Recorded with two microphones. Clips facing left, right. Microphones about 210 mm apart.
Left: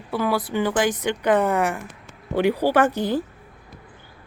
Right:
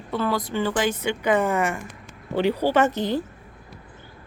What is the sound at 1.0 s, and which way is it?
Speech, 10° right (ahead or behind).